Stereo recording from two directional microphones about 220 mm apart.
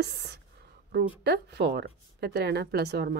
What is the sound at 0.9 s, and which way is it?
Speech, 45° right (ahead or behind).